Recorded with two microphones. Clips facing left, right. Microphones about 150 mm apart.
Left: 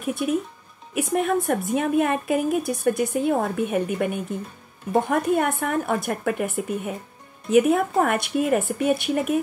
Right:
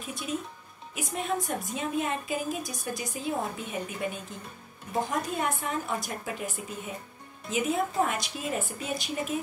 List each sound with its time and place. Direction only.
0.0 s a woman's voice: 60° left (ahead or behind)